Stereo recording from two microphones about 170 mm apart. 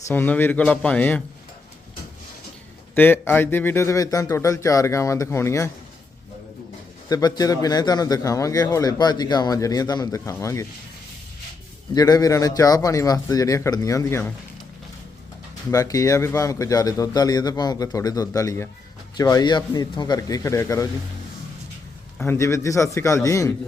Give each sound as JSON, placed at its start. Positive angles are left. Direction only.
{"t": 0.1, "sound": "speech", "side_deg": 10}
{"t": 2.9, "sound": "speech", "side_deg": 10}
{"t": 7.1, "sound": "a man's voice", "side_deg": 25}
{"t": 11.9, "sound": "a man's voice", "side_deg": 20}
{"t": 15.7, "sound": "a man's voice", "side_deg": 20}
{"t": 22.2, "sound": "speech", "side_deg": 15}